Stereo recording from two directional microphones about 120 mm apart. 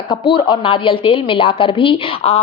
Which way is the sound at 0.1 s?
40° left (ahead or behind).